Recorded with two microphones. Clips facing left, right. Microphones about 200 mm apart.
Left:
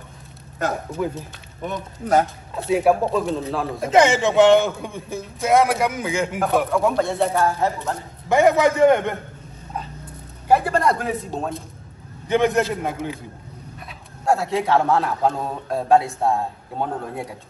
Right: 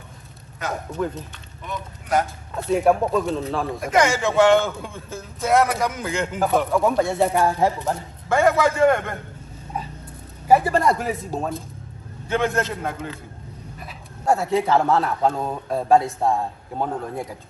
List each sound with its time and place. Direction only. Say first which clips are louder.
0.9 s a man's voice: left 1 dB; 10° left (ahead or behind)
1.6 s speech: left 5 dB; 45° left (ahead or behind)
2.5 s speech: even; 5° left (ahead or behind)
3.8 s a man's voice: left 4 dB; 25° left (ahead or behind)
5.6 s speech: left 2 dB; 5° left (ahead or behind); by 7.9 s 15° right (ahead or behind)
8.3 s a man's voice: left 2 dB; 15° left (ahead or behind)
10.5 s speech: right 1 dB; centre (ahead or behind)
12.3 s a man's voice: left 4 dB; 15° left (ahead or behind)
13.8 s speech: even; centre (ahead or behind)